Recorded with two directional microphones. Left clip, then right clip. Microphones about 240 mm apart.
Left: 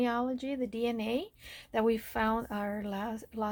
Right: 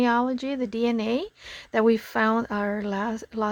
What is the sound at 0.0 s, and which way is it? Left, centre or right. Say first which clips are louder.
Speech: right 9 dB; right.